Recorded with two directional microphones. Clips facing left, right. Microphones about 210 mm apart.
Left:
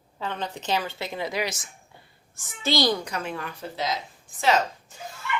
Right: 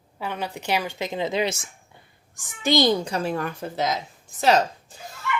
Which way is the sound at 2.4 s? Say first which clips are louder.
Right 4 dB; 15° right (ahead or behind).